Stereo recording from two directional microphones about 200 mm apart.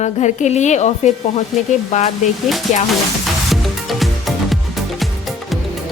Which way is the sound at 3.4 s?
Centre (ahead or behind).